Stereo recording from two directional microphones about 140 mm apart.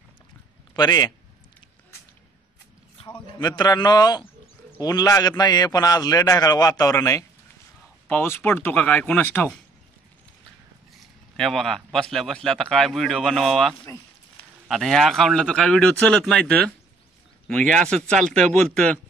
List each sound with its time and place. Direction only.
0.7 s a man's voice: 30° left (ahead or behind)
3.3 s a man's voice: 30° left (ahead or behind); by 9.5 s 10° left (ahead or behind)
11.3 s speech: centre (ahead or behind)
17.7 s speech: 5° left (ahead or behind)